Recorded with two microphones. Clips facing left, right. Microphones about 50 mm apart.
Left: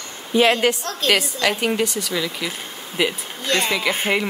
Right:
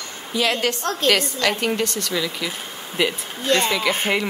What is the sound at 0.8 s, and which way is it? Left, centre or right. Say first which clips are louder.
Speech: right 3 dB; right.